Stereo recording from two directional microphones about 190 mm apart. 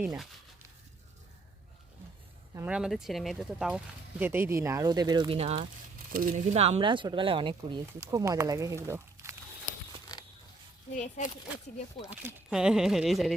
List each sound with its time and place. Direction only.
2.6 s speech: 5° right (ahead or behind); by 5.6 s 30° right (ahead or behind)
6.1 s speech: 45° right (ahead or behind); by 9.3 s 15° right (ahead or behind)
10.9 s speech: 40° left (ahead or behind)
12.1 s speech: 5° right (ahead or behind)